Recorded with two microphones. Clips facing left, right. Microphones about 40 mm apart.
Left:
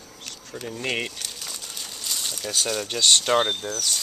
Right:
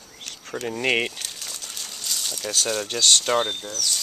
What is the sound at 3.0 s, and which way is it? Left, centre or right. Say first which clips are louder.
Speech: left 1 dB; centre.